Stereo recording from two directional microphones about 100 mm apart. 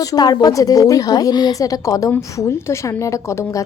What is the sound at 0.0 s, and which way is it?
A woman's voice, 40° left (ahead or behind).